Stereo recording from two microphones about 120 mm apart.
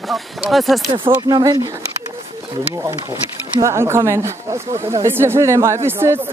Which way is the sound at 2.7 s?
25° right (ahead or behind).